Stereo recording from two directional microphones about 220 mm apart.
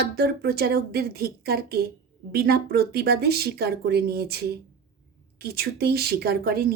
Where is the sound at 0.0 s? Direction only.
45° right (ahead or behind).